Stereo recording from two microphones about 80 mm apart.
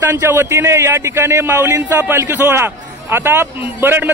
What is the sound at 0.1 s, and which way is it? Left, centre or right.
A man's voice, right.